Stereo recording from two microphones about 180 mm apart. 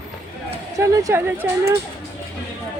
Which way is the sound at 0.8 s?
15° right (ahead or behind).